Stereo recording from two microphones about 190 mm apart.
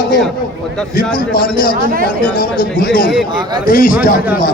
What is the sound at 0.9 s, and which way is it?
A man's voice, 50° left (ahead or behind).